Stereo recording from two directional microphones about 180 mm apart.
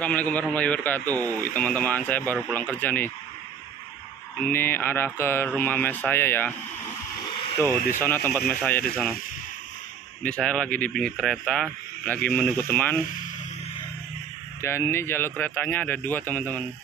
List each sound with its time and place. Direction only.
0.0 s a man's voice: 10° left (ahead or behind)
4.4 s a man's voice: 10° left (ahead or behind)
7.2 s a sound: 25° left (ahead or behind)
8.0 s a man's voice: 10° left (ahead or behind)
10.2 s a man's voice: 5° left (ahead or behind)
14.6 s a man's voice: 15° left (ahead or behind)